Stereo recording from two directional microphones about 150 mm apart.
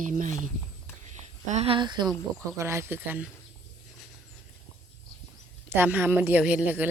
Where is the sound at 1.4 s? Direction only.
45° right (ahead or behind); by 2.1 s 30° right (ahead or behind).